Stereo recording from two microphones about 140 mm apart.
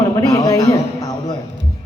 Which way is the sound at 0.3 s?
25° left (ahead or behind).